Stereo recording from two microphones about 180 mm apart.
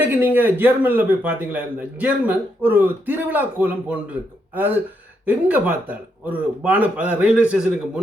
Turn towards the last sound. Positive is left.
turn(degrees=-5)  # may be behind; listen again after turning